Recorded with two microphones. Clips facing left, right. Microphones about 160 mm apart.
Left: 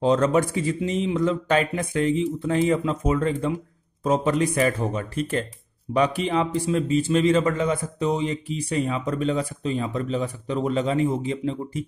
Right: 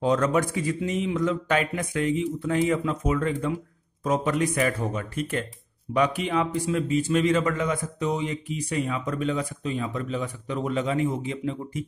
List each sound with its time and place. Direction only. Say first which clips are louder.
0.0 s a man's voice: left 3 dB; 25° left (ahead or behind)